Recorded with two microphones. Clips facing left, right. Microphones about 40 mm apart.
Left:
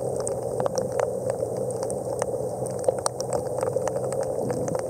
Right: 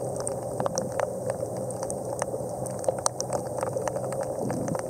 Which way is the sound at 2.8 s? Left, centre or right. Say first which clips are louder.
Left 3 dB; centre.